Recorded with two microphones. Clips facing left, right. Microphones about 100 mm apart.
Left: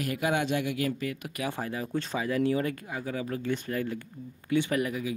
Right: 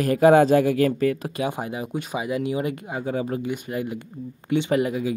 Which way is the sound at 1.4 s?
20° right (ahead or behind).